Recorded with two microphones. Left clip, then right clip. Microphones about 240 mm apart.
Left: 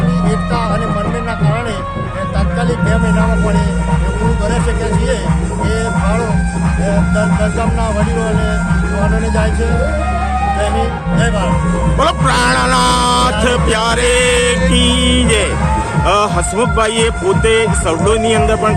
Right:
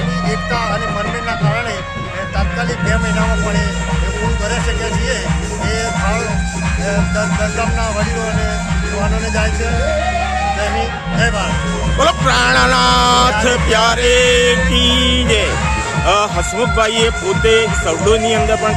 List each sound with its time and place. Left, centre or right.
11.9 s speech: centre